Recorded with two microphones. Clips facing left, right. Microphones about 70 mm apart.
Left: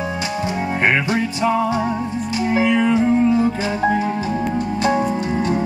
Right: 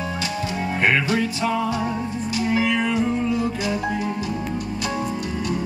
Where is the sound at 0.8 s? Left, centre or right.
Left.